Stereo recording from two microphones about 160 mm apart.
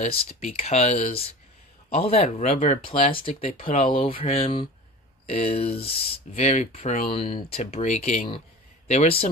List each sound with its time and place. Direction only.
0.0 s speech: 40° left (ahead or behind)